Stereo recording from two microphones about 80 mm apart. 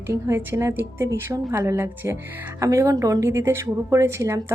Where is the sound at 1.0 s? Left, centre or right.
Right.